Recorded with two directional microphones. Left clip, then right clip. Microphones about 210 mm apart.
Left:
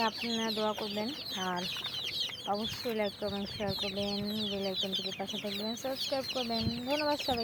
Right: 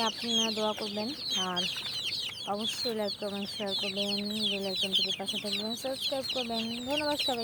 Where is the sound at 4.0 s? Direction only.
15° right (ahead or behind).